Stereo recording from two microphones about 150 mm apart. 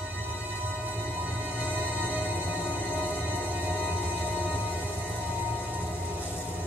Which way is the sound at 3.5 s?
10° right (ahead or behind).